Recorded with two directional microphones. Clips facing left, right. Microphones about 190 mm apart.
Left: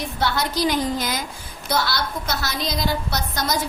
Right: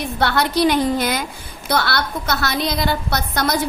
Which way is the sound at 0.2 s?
65° right (ahead or behind).